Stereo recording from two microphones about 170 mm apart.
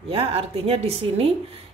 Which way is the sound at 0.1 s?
35° right (ahead or behind).